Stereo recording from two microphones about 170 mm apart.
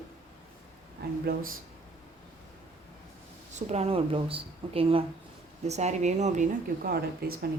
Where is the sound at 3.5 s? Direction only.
40° right (ahead or behind); by 7.5 s 60° right (ahead or behind).